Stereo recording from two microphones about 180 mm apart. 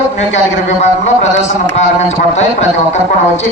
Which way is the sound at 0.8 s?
40° left (ahead or behind).